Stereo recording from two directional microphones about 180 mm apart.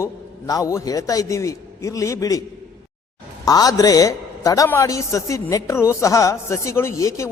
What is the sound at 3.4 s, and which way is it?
A man's voice, 20° left (ahead or behind).